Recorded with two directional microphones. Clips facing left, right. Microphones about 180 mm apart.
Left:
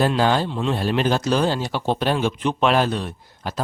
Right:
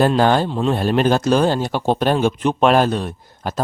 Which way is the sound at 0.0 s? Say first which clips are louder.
Right 4 dB; 50° right (ahead or behind).